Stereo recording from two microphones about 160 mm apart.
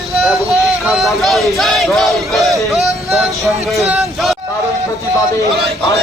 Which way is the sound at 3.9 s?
Centre (ahead or behind).